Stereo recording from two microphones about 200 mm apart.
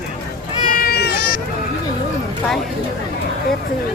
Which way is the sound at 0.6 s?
45° left (ahead or behind).